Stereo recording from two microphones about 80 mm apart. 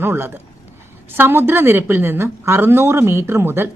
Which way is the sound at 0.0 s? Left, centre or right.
Right.